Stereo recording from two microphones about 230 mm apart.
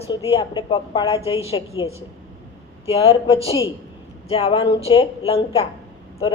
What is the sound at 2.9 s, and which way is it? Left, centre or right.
A woman's voice, left.